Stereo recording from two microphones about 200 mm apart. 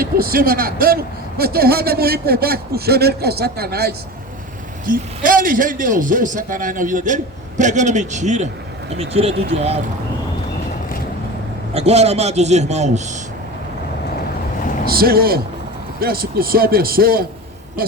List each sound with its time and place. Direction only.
0.0 s a man's voice: 50° right (ahead or behind); by 9.8 s 30° right (ahead or behind)
11.7 s a man's voice: 30° right (ahead or behind)
14.8 s a man's voice: 50° right (ahead or behind)